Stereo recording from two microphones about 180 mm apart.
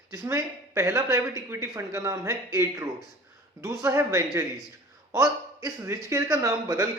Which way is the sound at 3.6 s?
20° right (ahead or behind).